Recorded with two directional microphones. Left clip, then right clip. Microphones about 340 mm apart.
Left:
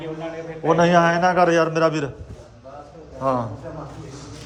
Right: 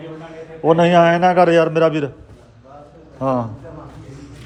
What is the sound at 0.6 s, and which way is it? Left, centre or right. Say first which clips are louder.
Speech: right 4 dB; centre.